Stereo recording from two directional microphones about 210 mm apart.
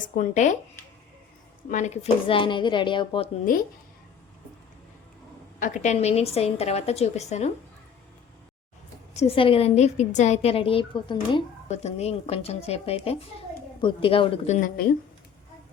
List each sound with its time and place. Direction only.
0.0 s a woman's voice: 35° left (ahead or behind)
1.7 s a woman's voice: 35° left (ahead or behind)
5.5 s a woman's voice: 35° left (ahead or behind)
9.1 s a woman's voice: 25° left (ahead or behind)